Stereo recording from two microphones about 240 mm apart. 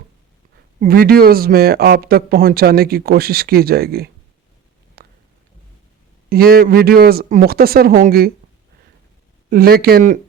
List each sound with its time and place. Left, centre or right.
0.8 s speech: right
5.0 s a sound: right
6.2 s speech: right
9.5 s speech: right